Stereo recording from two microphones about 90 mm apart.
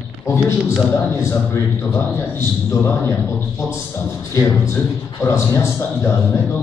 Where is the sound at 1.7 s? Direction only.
30° left (ahead or behind).